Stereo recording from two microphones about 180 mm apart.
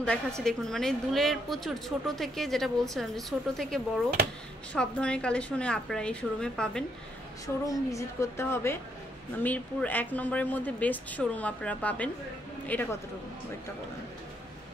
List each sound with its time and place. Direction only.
0.4 s a woman's voice: centre (ahead or behind)
7.4 s speech: 20° left (ahead or behind)